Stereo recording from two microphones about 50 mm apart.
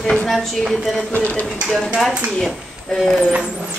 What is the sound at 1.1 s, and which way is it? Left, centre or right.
Speech, left.